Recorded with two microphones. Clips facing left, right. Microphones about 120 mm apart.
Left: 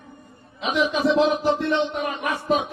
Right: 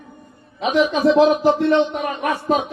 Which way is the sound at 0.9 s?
40° right (ahead or behind).